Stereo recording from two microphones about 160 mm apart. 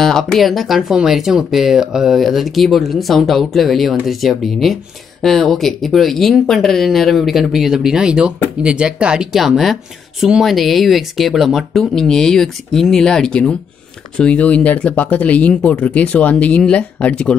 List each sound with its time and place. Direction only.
0.0 s speech: 5° left (ahead or behind)